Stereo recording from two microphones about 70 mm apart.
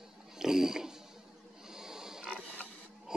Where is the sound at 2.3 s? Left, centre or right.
Left.